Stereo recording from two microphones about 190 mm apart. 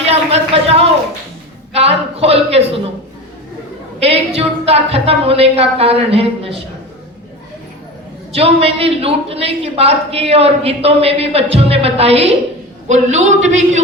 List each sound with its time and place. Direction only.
0.0 s a sound: 35° right (ahead or behind)
4.0 s a woman's voice: 30° right (ahead or behind)
8.3 s a woman's voice: 30° right (ahead or behind)